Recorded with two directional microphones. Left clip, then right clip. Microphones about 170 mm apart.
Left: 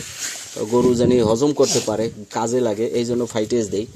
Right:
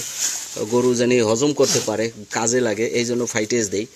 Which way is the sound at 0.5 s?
5° left (ahead or behind).